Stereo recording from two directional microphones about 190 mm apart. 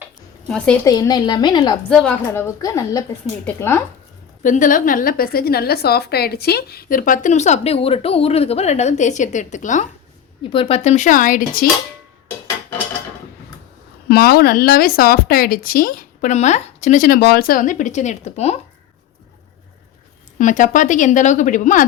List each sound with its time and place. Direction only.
0.4 s speech: 5° left (ahead or behind)
0.9 s a woman's voice: 20° left (ahead or behind)
1.9 s a woman's voice: 5° left (ahead or behind)
4.4 s a woman's voice: 45° left (ahead or behind)
10.5 s a woman's voice: 30° left (ahead or behind); by 11.6 s 45° left (ahead or behind)
14.1 s speech: 55° left (ahead or behind); by 18.5 s 35° left (ahead or behind)
20.4 s a woman's voice: 40° left (ahead or behind)